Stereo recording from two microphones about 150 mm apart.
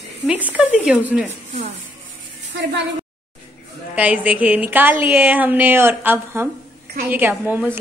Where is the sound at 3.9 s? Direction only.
10° right (ahead or behind).